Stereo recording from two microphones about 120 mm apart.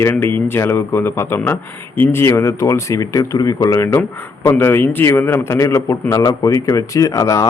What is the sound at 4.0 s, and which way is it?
Speech, 15° left (ahead or behind).